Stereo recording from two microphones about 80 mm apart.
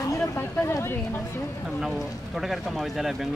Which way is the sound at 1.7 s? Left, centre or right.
Centre.